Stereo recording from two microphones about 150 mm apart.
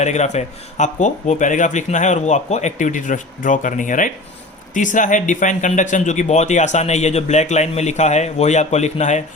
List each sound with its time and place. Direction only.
0.0 s speech: 50° left (ahead or behind)